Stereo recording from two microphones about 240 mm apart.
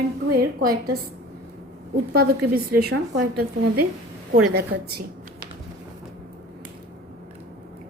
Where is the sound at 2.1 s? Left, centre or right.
Right.